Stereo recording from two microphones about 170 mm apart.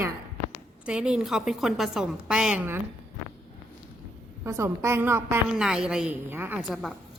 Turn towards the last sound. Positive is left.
turn(degrees=0)  # may be behind; listen again after turning